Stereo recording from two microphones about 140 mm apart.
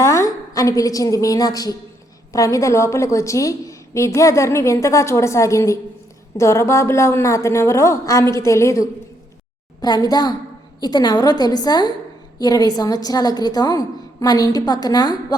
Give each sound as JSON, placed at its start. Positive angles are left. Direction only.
{"t": 0.0, "sound": "a woman's voice", "side_deg": 20}